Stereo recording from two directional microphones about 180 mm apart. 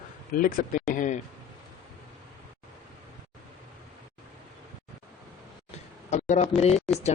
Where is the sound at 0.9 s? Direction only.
45° left (ahead or behind).